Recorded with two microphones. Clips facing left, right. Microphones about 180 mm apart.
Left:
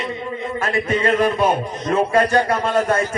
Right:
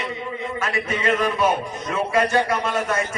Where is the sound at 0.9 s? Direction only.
35° left (ahead or behind).